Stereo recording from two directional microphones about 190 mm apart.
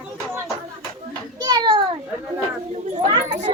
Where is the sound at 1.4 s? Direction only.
20° right (ahead or behind).